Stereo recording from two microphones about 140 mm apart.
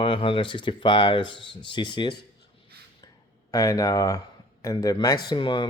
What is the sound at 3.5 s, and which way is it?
Speech, 25° left (ahead or behind).